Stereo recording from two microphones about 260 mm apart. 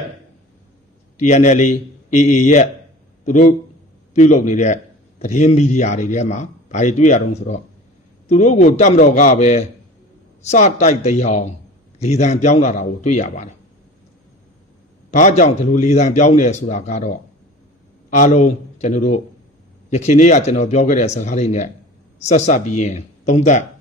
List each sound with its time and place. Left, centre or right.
1.2 s a man's voice: left
15.0 s a man's voice: left
18.1 s a man's voice: left